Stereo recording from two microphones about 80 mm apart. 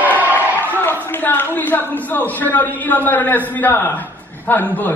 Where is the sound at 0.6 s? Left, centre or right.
Left.